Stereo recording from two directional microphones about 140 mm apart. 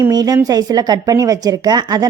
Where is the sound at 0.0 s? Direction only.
25° right (ahead or behind).